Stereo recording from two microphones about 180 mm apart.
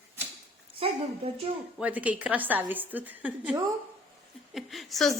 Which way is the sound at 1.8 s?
10° right (ahead or behind).